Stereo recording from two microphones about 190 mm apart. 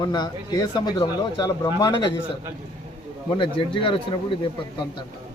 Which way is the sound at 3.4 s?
25° left (ahead or behind).